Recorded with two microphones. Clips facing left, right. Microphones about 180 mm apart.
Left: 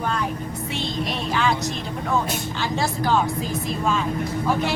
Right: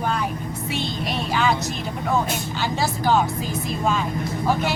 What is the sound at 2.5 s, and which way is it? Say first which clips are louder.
A woman's voice: even; centre (ahead or behind).